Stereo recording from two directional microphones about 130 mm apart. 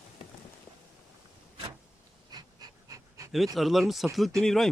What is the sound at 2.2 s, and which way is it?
Dog, 30° right (ahead or behind).